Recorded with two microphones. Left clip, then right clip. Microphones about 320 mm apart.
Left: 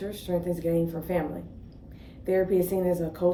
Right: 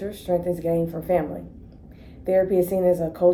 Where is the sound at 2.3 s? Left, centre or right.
Centre.